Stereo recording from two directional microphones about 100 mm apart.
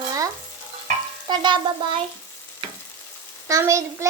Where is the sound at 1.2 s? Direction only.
50° right (ahead or behind).